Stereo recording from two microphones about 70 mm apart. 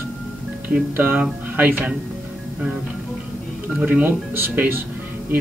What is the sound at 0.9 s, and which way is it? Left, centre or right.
Speech, right.